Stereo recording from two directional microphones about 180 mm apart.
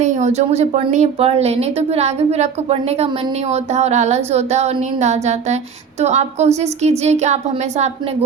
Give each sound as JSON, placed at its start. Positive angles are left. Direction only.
{"t": 0.0, "sound": "speech", "side_deg": -40}